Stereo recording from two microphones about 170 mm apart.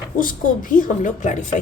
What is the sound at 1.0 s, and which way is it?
Speech, 45° left (ahead or behind).